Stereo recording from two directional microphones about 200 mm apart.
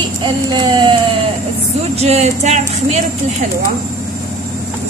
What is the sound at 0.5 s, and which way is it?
Speech, 20° right (ahead or behind).